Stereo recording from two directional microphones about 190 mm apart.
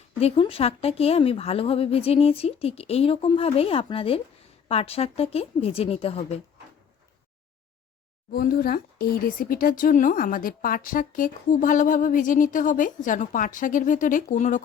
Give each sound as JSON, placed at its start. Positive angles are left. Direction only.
{"t": 0.2, "sound": "speech", "side_deg": 30}
{"t": 8.3, "sound": "speech", "side_deg": 50}